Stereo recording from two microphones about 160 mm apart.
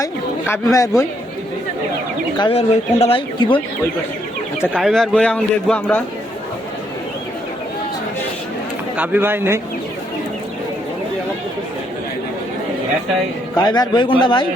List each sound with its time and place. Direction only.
0.0 s a man's voice: 15° left (ahead or behind)
2.4 s speech: 40° left (ahead or behind)
4.8 s a man's voice: 5° left (ahead or behind)
9.0 s speech: 10° right (ahead or behind)
13.6 s a man's voice: 25° left (ahead or behind)